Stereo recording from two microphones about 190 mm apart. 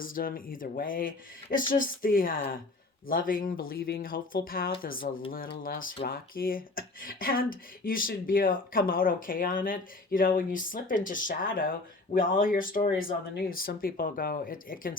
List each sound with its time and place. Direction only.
0.0 s speech: 50° left (ahead or behind)